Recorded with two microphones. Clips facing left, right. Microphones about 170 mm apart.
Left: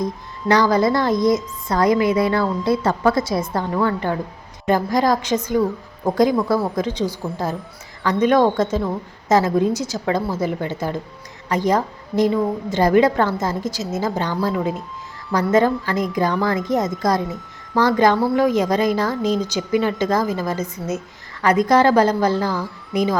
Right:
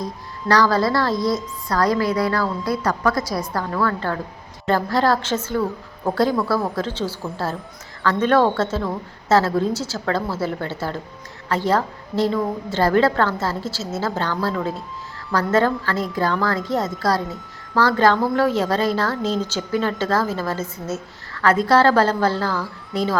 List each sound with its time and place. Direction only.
0.0 s a woman's voice: 20° left (ahead or behind)